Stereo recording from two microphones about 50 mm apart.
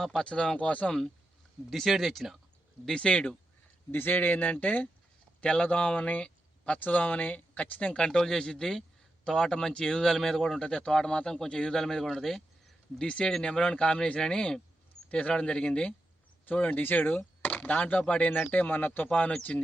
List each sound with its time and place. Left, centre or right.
0.0 s speech: centre
0.3 s speech: centre
1.7 s speech: centre
2.8 s speech: centre
3.9 s speech: left; by 13.1 s centre
13.1 s speech: centre